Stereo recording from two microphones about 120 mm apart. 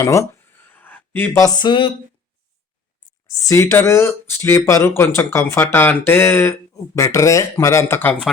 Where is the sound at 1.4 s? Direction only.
35° left (ahead or behind).